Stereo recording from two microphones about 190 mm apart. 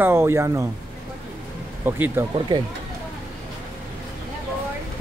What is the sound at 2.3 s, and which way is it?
Speech, 25° right (ahead or behind).